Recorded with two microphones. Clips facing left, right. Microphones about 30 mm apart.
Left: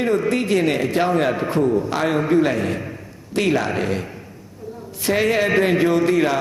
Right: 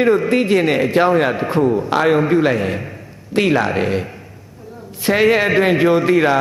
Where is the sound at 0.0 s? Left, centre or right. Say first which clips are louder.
Right 5 dB; right.